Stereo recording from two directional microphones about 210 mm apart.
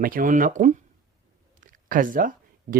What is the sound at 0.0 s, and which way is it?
Speech, 40° right (ahead or behind).